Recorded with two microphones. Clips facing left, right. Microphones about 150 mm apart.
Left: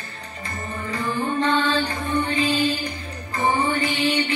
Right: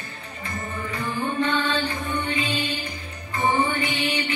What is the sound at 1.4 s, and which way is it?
Music, 35° left (ahead or behind).